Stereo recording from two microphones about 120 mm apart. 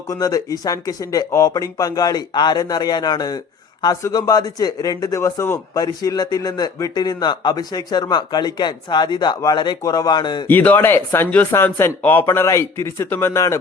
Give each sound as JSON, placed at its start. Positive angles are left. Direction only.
{"t": 0.1, "sound": "speech", "side_deg": 30}
{"t": 10.4, "sound": "speech", "side_deg": 15}